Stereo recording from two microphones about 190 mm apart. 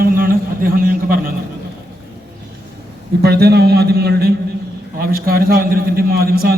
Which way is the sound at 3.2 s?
55° right (ahead or behind).